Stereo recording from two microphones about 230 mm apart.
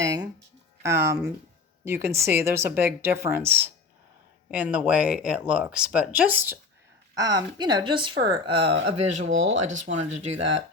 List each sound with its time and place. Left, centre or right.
0.0 s music: centre
0.8 s a woman's voice: centre; by 9.3 s right
9.3 s speech: right
9.8 s a woman's voice: right